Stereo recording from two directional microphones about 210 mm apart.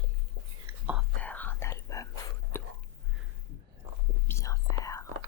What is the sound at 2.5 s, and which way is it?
Hiccup, 10° left (ahead or behind).